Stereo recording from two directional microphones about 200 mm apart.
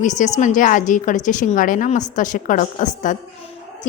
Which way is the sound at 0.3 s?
40° left (ahead or behind).